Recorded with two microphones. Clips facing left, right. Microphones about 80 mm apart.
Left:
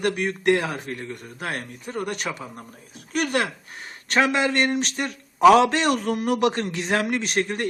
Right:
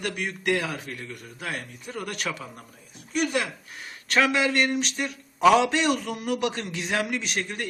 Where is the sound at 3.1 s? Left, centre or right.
Left.